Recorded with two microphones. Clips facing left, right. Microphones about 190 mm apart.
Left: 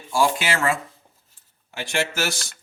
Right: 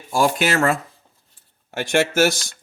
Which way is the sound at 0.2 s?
50° right (ahead or behind).